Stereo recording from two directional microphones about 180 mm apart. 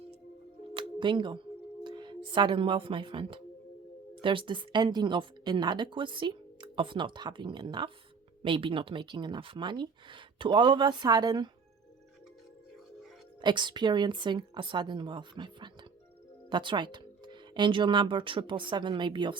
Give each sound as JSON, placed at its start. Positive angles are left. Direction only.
{"t": 0.7, "sound": "music", "side_deg": -25}
{"t": 1.8, "sound": "a woman's voice", "side_deg": -25}
{"t": 13.4, "sound": "a woman's voice", "side_deg": -25}